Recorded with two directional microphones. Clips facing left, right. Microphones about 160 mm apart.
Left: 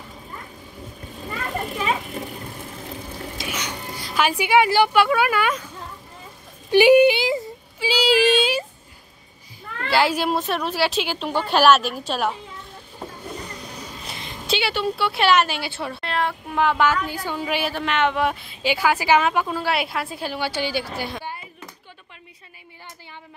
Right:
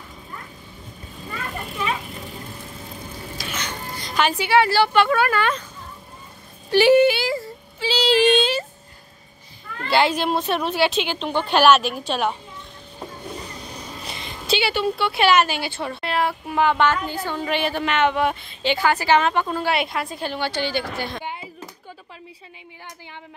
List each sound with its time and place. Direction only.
3.4 s speech: 10° left (ahead or behind)
6.7 s child singing: 15° left (ahead or behind)
9.8 s a woman's voice: 5° left (ahead or behind)
14.1 s a woman's voice: centre (ahead or behind)
21.2 s a sound: 15° right (ahead or behind)